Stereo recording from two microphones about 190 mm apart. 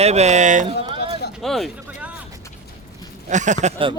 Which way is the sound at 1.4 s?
Centre (ahead or behind).